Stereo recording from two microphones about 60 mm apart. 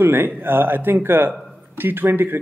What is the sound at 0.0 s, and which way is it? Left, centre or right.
Speech, right.